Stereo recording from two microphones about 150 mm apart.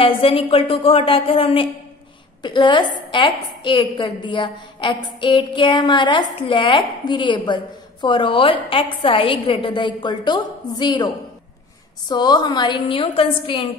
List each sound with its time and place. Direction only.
0.0 s a woman's voice: 35° left (ahead or behind)
12.1 s a woman's voice: 30° left (ahead or behind)